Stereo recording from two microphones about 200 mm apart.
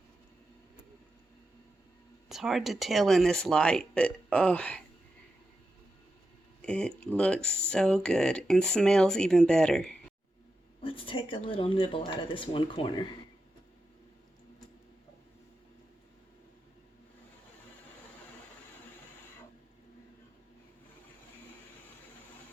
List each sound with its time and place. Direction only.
2.3 s speech: centre (ahead or behind)
6.6 s speech: 5° left (ahead or behind)
10.8 s speech: 25° left (ahead or behind)